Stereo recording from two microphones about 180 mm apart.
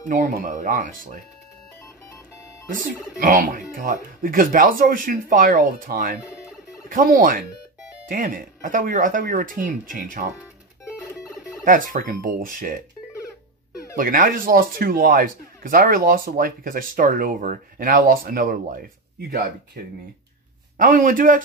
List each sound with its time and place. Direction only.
0.1 s speech: 50° right (ahead or behind)
2.7 s speech: 50° right (ahead or behind)
10.9 s music: 5° right (ahead or behind)
11.6 s speech: 50° right (ahead or behind)
13.9 s speech: 50° right (ahead or behind)
20.7 s speech: 50° right (ahead or behind)